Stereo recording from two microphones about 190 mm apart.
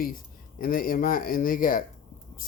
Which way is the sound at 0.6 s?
50° left (ahead or behind).